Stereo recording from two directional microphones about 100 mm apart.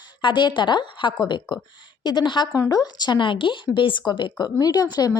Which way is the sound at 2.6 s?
35° left (ahead or behind).